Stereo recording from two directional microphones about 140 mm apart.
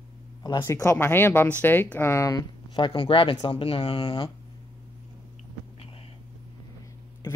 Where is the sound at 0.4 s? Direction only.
30° left (ahead or behind).